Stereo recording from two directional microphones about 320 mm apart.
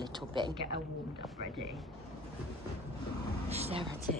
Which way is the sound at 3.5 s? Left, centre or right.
Centre.